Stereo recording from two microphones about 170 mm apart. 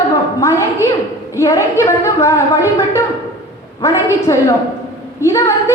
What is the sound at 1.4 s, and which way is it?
A woman's voice, 15° left (ahead or behind).